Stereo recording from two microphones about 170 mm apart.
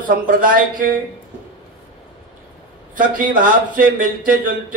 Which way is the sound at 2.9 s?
50° right (ahead or behind).